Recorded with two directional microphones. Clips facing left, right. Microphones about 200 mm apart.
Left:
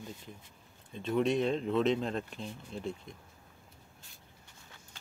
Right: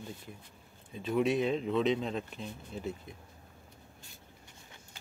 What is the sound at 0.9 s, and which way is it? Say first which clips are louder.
Speech: even; 5° right (ahead or behind).